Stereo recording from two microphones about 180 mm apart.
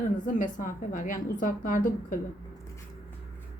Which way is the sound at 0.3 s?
45° left (ahead or behind).